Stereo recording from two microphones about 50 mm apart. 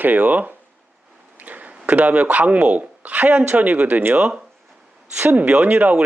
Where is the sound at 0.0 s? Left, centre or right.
Right.